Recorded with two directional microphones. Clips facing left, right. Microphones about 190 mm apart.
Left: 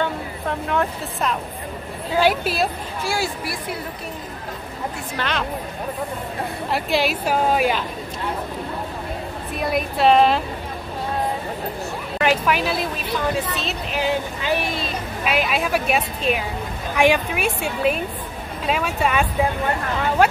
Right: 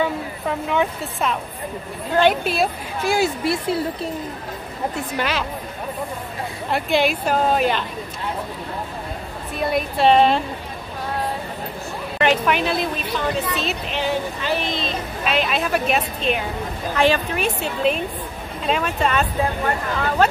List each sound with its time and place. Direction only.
0.0 s a woman's voice: centre (ahead or behind)
3.0 s a woman's voice: 20° right (ahead or behind)
5.1 s speech: 10° right (ahead or behind)
6.7 s a woman's voice: centre (ahead or behind)
9.6 s a woman's voice: centre (ahead or behind)
12.2 s a woman's voice: 5° left (ahead or behind)
14.0 s speech: 15° left (ahead or behind)